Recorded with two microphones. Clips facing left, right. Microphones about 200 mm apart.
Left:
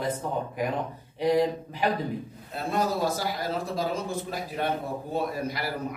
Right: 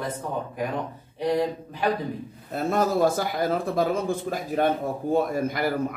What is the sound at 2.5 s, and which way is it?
A man's voice, 50° right (ahead or behind).